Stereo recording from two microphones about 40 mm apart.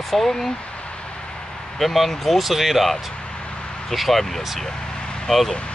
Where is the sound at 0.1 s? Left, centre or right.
Centre.